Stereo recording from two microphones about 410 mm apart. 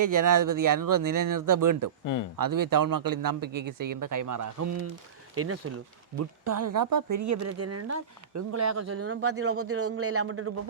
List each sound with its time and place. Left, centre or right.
0.0 s speech: right
6.1 s speech: right